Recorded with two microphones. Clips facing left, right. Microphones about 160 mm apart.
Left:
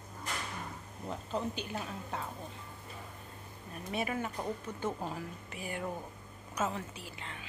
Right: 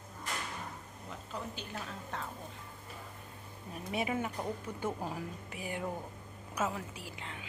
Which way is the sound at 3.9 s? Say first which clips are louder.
Right 1 dB; 15° right (ahead or behind).